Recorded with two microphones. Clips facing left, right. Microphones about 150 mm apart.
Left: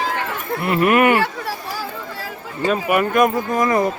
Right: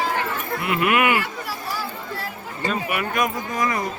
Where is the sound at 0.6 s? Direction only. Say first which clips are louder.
Left 5 dB; 40° left (ahead or behind).